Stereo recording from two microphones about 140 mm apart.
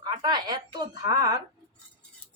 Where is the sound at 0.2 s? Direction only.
30° right (ahead or behind).